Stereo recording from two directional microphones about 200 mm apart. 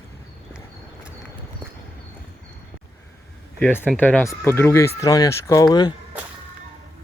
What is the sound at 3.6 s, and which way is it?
Speech, 10° left (ahead or behind).